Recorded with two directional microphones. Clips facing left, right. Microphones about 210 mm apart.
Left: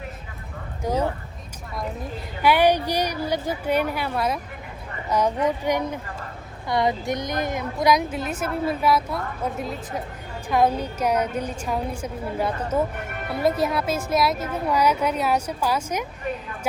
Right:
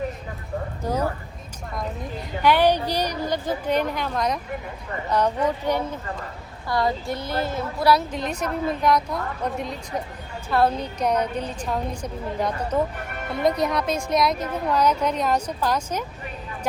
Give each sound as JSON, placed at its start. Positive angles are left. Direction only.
{"t": 0.8, "sound": "speech", "side_deg": 10}
{"t": 2.4, "sound": "a woman's voice", "side_deg": 10}